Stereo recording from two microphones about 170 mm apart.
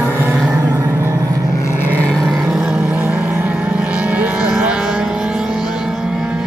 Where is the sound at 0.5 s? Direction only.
20° right (ahead or behind).